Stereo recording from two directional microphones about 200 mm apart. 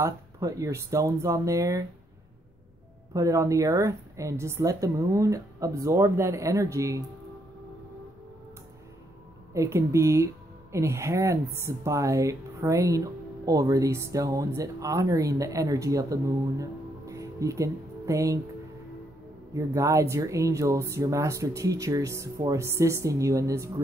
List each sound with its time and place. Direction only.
0.0 s speech: 15° right (ahead or behind)
3.1 s speech: 15° right (ahead or behind)
9.5 s speech: 15° right (ahead or behind)
19.5 s speech: 15° right (ahead or behind)